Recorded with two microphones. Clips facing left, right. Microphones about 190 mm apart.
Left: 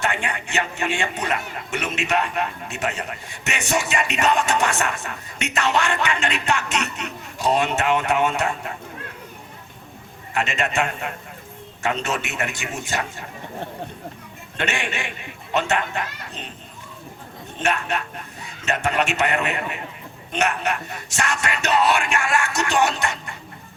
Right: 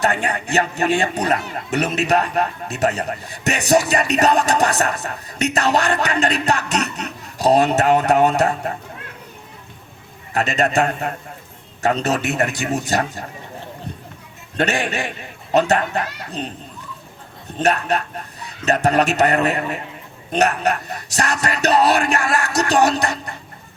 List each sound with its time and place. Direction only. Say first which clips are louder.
0.0 s a man's voice: right 5 dB; 40° right (ahead or behind)
10.3 s a man's voice: right 5 dB; 40° right (ahead or behind)
14.5 s a man's voice: right 6 dB; 40° right (ahead or behind)
17.6 s a man's voice: right 5 dB; 40° right (ahead or behind)